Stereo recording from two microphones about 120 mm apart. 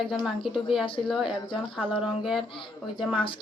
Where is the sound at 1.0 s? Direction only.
5° right (ahead or behind).